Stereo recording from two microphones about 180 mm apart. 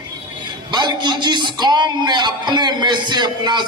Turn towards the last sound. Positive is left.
turn(degrees=-25)  # may be behind; listen again after turning